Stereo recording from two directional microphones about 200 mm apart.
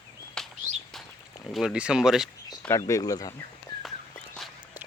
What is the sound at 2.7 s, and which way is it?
Speech, 15° left (ahead or behind).